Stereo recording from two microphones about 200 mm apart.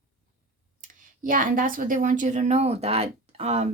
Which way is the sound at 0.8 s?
40° right (ahead or behind).